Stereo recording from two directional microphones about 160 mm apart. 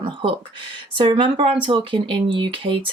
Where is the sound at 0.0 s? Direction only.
35° right (ahead or behind).